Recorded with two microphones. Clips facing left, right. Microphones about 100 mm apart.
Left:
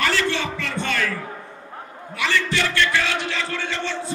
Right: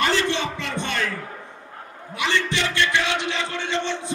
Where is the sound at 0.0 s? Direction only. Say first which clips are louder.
Even; 20° right (ahead or behind).